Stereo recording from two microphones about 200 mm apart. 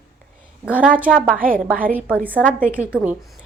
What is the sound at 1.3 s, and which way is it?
Speech, 45° right (ahead or behind).